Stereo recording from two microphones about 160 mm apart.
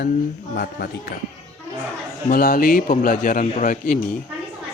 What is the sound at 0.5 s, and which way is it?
Speech, 75° left (ahead or behind).